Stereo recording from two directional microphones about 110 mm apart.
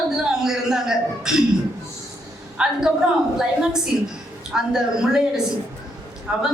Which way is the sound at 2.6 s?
10° right (ahead or behind).